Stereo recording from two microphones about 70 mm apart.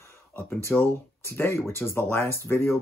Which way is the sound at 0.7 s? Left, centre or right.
Centre.